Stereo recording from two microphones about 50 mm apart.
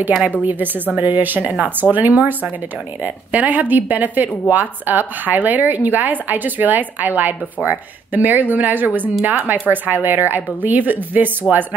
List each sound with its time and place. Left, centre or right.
0.4 s speech: right